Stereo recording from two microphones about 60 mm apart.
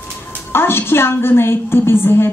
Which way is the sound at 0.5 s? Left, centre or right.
Left.